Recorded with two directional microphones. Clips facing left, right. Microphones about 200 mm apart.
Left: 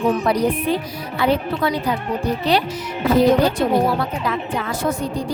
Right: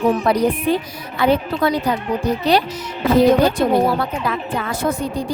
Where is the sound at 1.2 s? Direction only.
45° right (ahead or behind).